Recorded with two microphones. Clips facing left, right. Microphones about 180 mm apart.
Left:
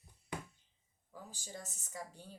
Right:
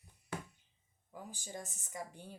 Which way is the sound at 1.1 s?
15° right (ahead or behind).